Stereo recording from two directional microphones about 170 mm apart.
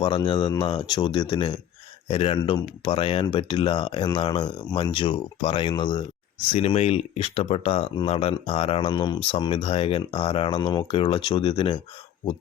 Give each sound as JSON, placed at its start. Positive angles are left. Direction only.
{"t": 0.0, "sound": "speech", "side_deg": 30}